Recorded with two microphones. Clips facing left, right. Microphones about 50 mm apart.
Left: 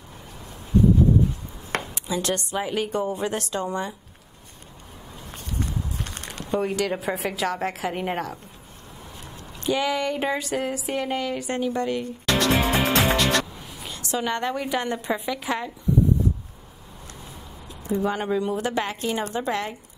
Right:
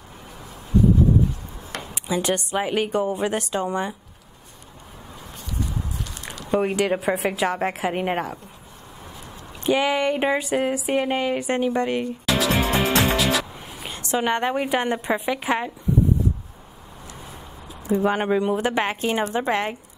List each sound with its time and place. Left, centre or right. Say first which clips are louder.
2.0 s speech: right 6 dB; right
5.3 s walk: even; left
6.5 s speech: right 3 dB; right
9.6 s speech: right 3 dB; right
12.3 s music: left 1 dB; centre
13.7 s speech: right 4 dB; right
17.8 s a woman's voice: right 4 dB; right